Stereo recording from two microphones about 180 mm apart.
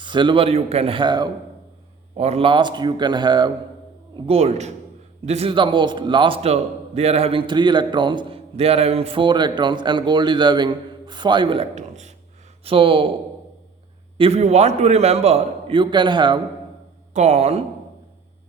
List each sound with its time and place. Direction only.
0.0 s a man's voice: 25° right (ahead or behind)
2.1 s a man's voice: 35° right (ahead or behind)
4.1 s a man's voice: 35° right (ahead or behind)
12.6 s a man's voice: 30° right (ahead or behind)
14.2 s a man's voice: 35° right (ahead or behind)
17.2 s a man's voice: 35° right (ahead or behind)